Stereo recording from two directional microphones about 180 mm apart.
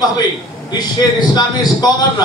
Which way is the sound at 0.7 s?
20° left (ahead or behind).